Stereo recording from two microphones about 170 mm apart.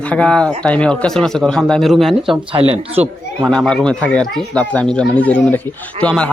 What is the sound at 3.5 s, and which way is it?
Speech, 5° left (ahead or behind).